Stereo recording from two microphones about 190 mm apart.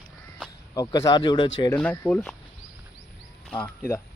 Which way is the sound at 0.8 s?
20° left (ahead or behind).